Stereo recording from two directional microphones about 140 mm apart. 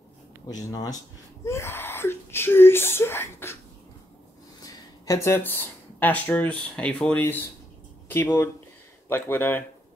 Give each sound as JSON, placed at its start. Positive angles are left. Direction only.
{"t": 0.7, "sound": "speech", "side_deg": 25}
{"t": 4.6, "sound": "speech", "side_deg": 25}